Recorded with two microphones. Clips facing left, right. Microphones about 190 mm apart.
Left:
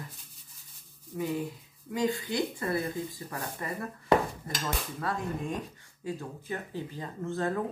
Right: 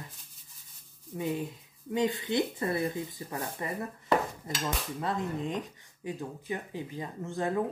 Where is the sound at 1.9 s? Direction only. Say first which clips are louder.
Right 1 dB; 25° right (ahead or behind).